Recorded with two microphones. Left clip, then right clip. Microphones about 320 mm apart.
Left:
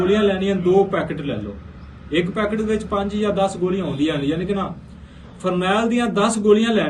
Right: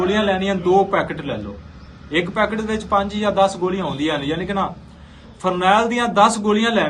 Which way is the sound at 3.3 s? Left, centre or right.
Centre.